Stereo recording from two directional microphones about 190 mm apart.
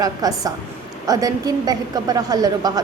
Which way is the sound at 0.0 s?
20° right (ahead or behind).